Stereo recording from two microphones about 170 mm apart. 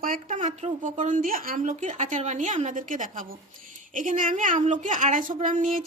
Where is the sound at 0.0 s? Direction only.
50° right (ahead or behind).